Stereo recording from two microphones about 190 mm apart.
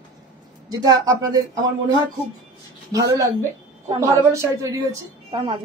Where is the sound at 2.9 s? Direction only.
15° right (ahead or behind).